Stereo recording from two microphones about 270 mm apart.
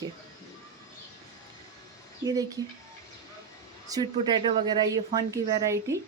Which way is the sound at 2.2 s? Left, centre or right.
Centre.